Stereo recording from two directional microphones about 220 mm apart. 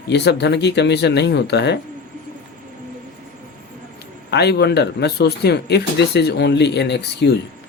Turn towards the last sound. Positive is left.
turn(degrees=50)  # may be behind; listen again after turning